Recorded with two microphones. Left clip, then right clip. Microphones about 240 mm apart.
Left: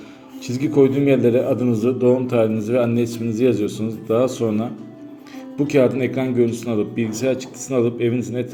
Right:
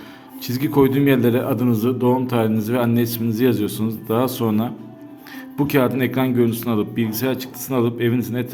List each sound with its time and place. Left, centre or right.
0.4 s a man's voice: right